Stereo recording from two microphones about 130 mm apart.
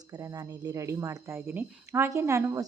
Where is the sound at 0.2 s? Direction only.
25° right (ahead or behind).